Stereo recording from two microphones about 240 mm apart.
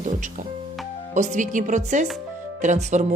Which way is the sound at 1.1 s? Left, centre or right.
Right.